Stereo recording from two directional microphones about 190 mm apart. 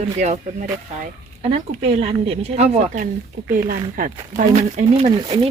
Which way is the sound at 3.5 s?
50° right (ahead or behind).